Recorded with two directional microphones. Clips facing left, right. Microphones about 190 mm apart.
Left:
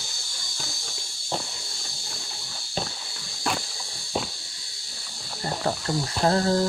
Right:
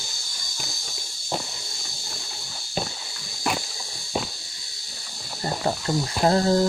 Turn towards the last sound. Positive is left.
turn(degrees=-20)  # may be behind; listen again after turning